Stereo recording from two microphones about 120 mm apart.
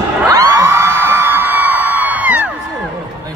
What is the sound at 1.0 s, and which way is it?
Music, 15° right (ahead or behind).